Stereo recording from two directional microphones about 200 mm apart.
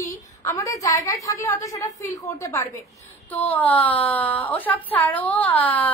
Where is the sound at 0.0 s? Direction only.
15° left (ahead or behind).